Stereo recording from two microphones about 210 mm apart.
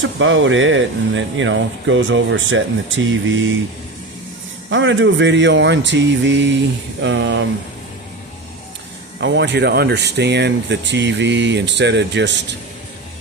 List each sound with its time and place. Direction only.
0.0 s speech: 65° right (ahead or behind)
4.7 s speech: 60° right (ahead or behind)
9.2 s speech: 55° right (ahead or behind)